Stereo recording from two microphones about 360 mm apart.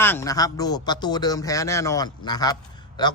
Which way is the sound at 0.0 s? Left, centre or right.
Centre.